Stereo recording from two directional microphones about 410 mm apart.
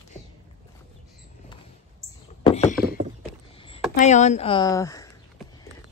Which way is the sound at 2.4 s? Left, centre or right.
Centre.